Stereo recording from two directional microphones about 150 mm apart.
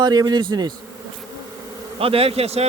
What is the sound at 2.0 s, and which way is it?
Speech, 40° right (ahead or behind).